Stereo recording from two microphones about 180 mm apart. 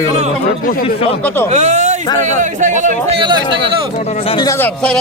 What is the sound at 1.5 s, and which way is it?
Speech, 40° right (ahead or behind).